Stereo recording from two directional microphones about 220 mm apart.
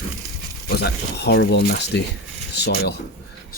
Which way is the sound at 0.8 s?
50° left (ahead or behind).